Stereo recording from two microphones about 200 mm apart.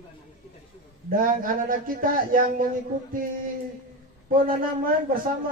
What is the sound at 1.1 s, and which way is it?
Speech, 45° right (ahead or behind).